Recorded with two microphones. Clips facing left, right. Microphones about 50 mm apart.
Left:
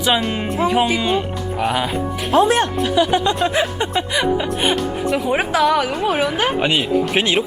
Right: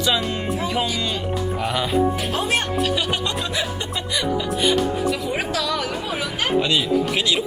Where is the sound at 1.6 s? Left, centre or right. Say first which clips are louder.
Left 8 dB; centre.